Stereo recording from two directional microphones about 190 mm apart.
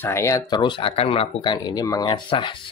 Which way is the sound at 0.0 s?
15° left (ahead or behind).